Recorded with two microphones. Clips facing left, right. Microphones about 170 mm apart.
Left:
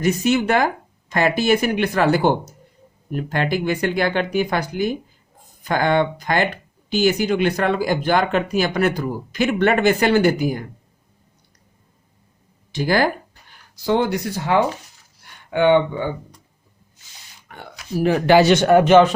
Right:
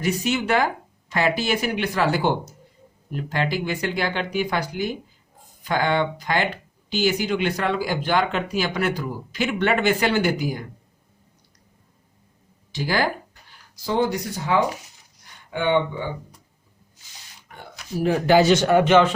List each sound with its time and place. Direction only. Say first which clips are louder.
0.0 s speech: left 5 dB; 45° left (ahead or behind)
12.7 s speech: left 5 dB; 50° left (ahead or behind)
13.8 s speech: left 3 dB; 70° left (ahead or behind)
17.5 s a sound: left 3 dB; 65° left (ahead or behind)
18.0 s a man's voice: left 3 dB; 75° left (ahead or behind); by 19.1 s 40° left (ahead or behind)